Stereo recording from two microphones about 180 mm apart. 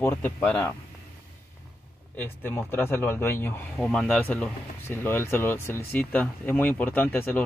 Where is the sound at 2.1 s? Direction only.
10° left (ahead or behind).